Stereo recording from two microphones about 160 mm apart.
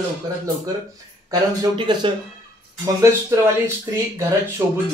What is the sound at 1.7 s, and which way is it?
Speech, 30° right (ahead or behind).